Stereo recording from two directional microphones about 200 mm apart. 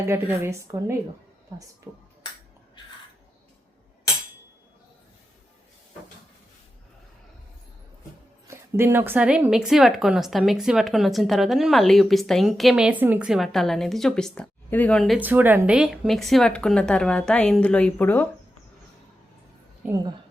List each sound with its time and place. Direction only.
0.0 s a woman's voice: 10° right (ahead or behind)
8.4 s a woman's voice: 10° right (ahead or behind); by 18.3 s 10° left (ahead or behind)
19.9 s a woman's voice: 20° right (ahead or behind)